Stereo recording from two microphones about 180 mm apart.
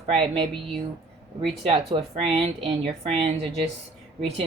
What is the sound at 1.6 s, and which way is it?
Speech, 35° right (ahead or behind).